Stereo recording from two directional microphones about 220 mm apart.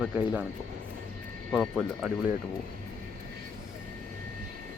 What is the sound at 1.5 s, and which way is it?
Speech, 5° left (ahead or behind).